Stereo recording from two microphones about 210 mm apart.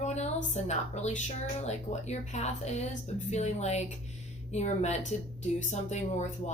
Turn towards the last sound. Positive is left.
turn(degrees=35)  # may be behind; listen again after turning